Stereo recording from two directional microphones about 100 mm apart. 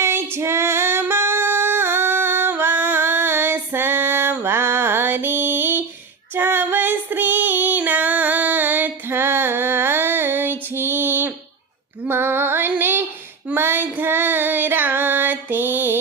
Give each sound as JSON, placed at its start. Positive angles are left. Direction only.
{"t": 0.0, "sound": "female singing", "side_deg": -25}